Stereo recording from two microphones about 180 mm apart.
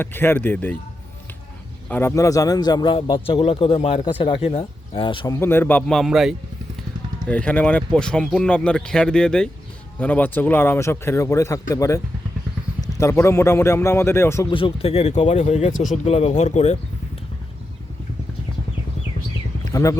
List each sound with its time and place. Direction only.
0.0 s a man's voice: 10° left (ahead or behind)
1.9 s a man's voice: 15° left (ahead or behind)
14.4 s speech: 30° left (ahead or behind)
19.7 s a man's voice: 20° left (ahead or behind)